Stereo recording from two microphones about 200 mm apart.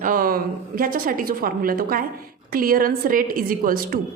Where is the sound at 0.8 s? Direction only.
45° right (ahead or behind).